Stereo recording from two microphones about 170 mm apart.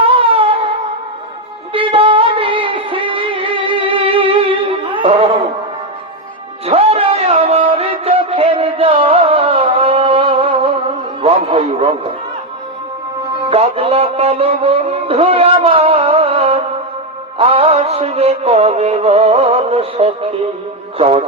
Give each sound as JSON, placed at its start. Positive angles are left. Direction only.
{"t": 0.1, "sound": "music", "side_deg": -30}
{"t": 1.7, "sound": "music", "side_deg": -30}
{"t": 6.7, "sound": "music", "side_deg": -35}
{"t": 11.2, "sound": "a sound", "side_deg": -35}
{"t": 13.5, "sound": "a sound", "side_deg": -35}
{"t": 17.3, "sound": "music", "side_deg": -35}
{"t": 21.0, "sound": "a man's voice", "side_deg": -35}